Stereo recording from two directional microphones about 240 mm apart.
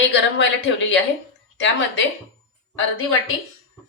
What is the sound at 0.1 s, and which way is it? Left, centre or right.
Speech, left.